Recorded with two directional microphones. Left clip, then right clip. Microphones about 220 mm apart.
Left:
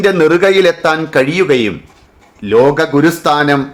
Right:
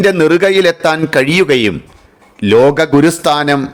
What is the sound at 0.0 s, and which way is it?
A man's voice, 40° right (ahead or behind).